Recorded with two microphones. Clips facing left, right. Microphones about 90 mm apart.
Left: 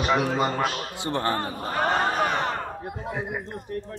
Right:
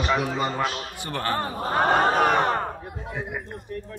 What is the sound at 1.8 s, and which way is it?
Speech, 45° right (ahead or behind).